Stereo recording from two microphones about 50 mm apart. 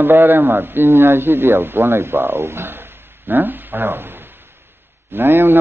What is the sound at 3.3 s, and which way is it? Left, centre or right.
A man's voice, right.